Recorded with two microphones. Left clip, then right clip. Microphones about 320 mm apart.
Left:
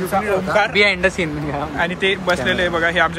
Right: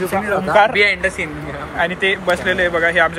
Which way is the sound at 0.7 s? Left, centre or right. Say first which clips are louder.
Even; left.